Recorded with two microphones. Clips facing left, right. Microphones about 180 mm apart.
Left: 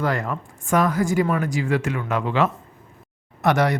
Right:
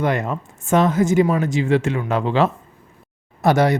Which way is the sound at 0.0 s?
20° right (ahead or behind).